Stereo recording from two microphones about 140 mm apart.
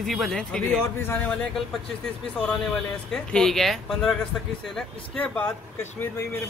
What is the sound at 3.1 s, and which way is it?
Speech, 5° left (ahead or behind).